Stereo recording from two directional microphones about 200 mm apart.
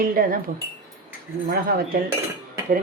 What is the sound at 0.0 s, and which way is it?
Speech, 45° right (ahead or behind).